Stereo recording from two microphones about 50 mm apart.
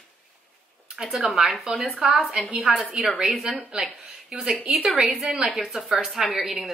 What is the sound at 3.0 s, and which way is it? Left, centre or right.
Speech, centre.